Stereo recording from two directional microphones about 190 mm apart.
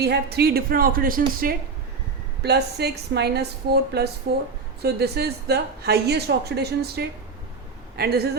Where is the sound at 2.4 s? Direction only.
60° right (ahead or behind).